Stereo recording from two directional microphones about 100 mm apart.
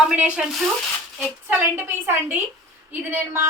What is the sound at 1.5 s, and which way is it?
A woman's voice, 20° right (ahead or behind).